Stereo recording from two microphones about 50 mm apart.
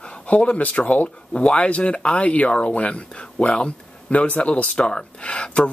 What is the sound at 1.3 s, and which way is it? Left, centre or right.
Speech, left.